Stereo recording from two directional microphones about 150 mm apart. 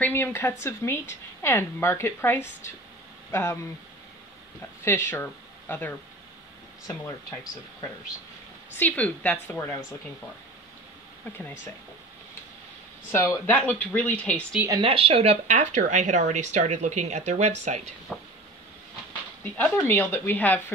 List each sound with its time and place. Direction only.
0.0 s a woman's voice: 15° left (ahead or behind)
4.8 s speech: 15° left (ahead or behind)
8.7 s a woman's voice: 10° left (ahead or behind)
13.1 s a woman's voice: 15° left (ahead or behind)
14.8 s speech: 40° right (ahead or behind)
18.1 s vehicle: centre (ahead or behind)
19.4 s a woman's voice: 10° left (ahead or behind)